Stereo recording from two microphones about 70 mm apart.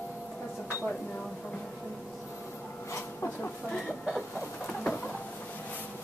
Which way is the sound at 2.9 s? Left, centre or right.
Left.